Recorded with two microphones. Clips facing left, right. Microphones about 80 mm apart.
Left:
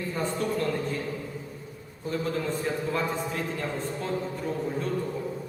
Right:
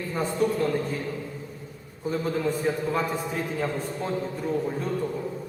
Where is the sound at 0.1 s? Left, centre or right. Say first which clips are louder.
Right 5 dB; centre.